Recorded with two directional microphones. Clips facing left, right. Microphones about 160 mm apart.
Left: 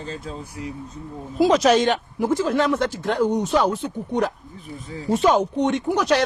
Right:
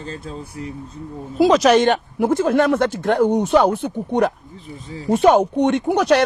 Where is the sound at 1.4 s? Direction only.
80° right.